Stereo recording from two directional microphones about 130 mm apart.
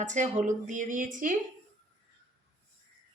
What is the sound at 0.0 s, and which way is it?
A woman's voice, 70° right (ahead or behind).